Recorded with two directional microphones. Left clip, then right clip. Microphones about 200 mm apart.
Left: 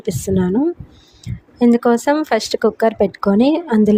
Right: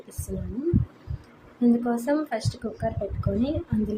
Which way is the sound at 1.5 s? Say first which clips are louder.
Left 11 dB; 45° left (ahead or behind).